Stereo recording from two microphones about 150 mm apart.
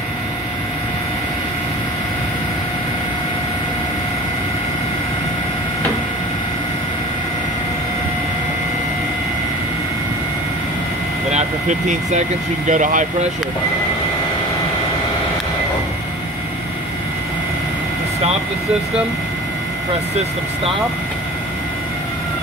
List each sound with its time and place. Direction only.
11.3 s speech: 50° right (ahead or behind)